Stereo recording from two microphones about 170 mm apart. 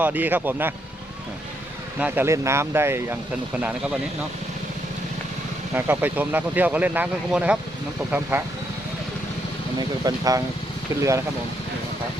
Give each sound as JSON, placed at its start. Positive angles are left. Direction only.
{"t": 0.0, "sound": "speech", "side_deg": -10}
{"t": 2.0, "sound": "speech", "side_deg": -10}
{"t": 5.7, "sound": "speech", "side_deg": -10}
{"t": 9.7, "sound": "speech", "side_deg": -25}